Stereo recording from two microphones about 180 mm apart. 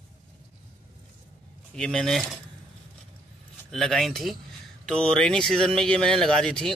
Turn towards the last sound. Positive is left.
turn(degrees=5)  # may be behind; listen again after turning